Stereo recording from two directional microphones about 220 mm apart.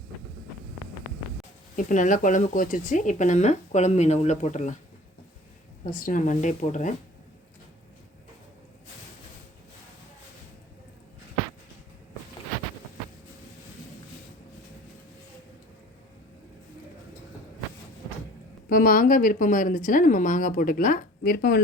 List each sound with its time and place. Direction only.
1.7 s speech: 35° left (ahead or behind)
5.8 s speech: 40° left (ahead or behind)
18.7 s speech: 40° left (ahead or behind)